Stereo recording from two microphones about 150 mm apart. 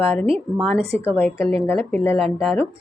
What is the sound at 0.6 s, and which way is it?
A woman's voice, 5° left (ahead or behind).